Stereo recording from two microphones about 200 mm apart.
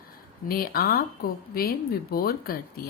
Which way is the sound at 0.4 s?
45° left (ahead or behind).